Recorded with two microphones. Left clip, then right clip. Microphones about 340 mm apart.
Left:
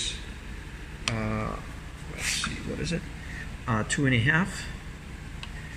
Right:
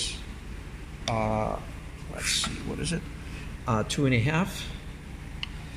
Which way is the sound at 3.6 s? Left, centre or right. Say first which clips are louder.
Even; centre.